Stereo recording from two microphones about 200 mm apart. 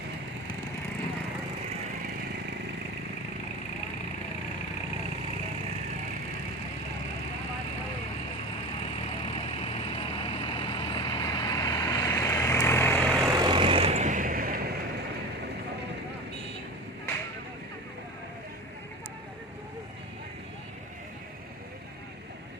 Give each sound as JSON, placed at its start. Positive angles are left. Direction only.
{"t": 9.0, "sound": "vehicle", "side_deg": 30}
{"t": 13.2, "sound": "vehicle", "side_deg": -20}